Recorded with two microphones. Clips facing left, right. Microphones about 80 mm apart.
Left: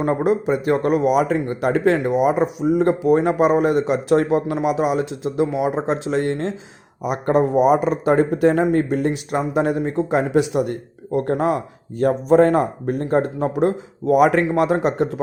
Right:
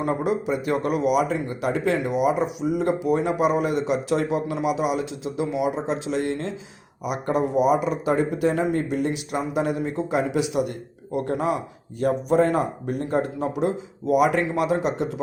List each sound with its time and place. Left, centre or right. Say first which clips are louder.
0.0 s speech: left 5 dB; left
1.3 s a man's voice: left 5 dB; left
2.0 s a man's voice: left 4 dB; left